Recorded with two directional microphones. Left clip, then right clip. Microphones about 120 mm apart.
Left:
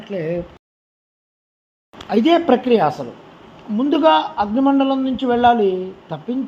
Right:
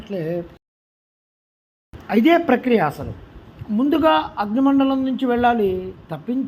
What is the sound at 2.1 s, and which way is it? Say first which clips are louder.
A man's voice: left 1 dB; 20° right (ahead or behind).